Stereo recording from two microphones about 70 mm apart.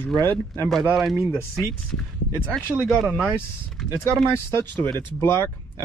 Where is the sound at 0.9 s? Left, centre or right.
Centre.